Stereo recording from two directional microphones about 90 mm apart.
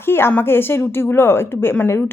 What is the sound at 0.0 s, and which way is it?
Speech, 25° left (ahead or behind).